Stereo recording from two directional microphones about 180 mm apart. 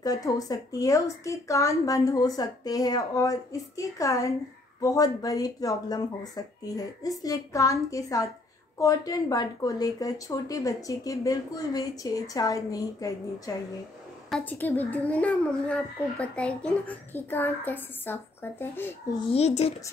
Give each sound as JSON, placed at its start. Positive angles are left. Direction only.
{"t": 0.0, "sound": "a child's voice", "side_deg": 20}
{"t": 19.3, "sound": "speech", "side_deg": 35}